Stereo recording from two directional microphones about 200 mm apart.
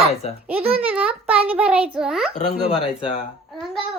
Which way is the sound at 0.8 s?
5° right (ahead or behind).